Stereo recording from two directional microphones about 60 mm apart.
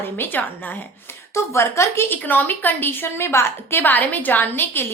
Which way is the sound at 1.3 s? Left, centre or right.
Left.